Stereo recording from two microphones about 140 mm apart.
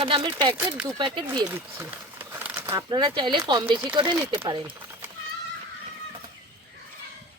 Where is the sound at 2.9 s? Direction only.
35° right (ahead or behind).